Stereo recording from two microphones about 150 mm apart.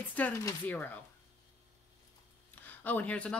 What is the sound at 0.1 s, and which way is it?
Speech, 15° left (ahead or behind).